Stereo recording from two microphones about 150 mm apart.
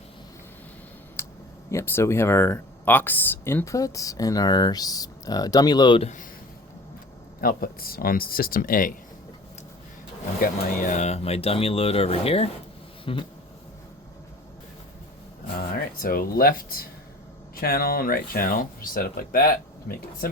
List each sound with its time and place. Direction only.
1.2 s a sound: 15° left (ahead or behind)
1.7 s speech: 15° left (ahead or behind)
6.0 s speech: 50° left (ahead or behind)
7.4 s speech: 80° left
10.4 s speech: 55° left (ahead or behind); by 13.2 s 35° left (ahead or behind)
15.5 s speech: 75° left (ahead or behind)